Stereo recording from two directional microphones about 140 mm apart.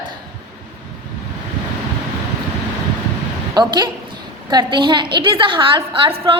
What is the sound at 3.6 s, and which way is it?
A woman's voice, 35° right (ahead or behind).